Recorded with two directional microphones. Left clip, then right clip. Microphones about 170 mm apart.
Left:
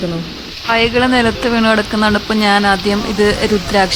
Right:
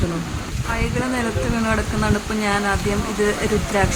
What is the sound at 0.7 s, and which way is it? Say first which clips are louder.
Speech: left 12 dB; 55° left (ahead or behind).